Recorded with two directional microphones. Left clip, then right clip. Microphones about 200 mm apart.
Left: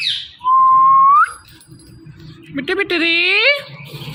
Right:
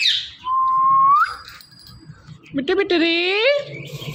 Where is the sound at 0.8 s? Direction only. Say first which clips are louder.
Left 5 dB; 30° left (ahead or behind).